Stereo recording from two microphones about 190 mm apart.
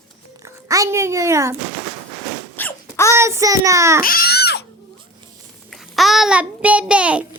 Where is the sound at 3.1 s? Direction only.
15° right (ahead or behind).